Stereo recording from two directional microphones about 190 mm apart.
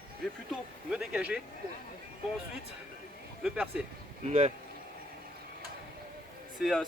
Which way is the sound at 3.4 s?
5° right (ahead or behind).